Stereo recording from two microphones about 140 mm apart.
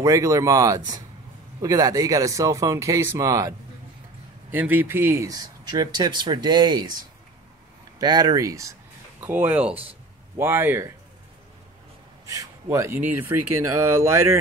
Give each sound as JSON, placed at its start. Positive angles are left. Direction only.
{"t": 0.0, "sound": "speech", "side_deg": -20}
{"t": 8.0, "sound": "speech", "side_deg": -30}
{"t": 9.2, "sound": "speech", "side_deg": -10}
{"t": 12.6, "sound": "speech", "side_deg": -20}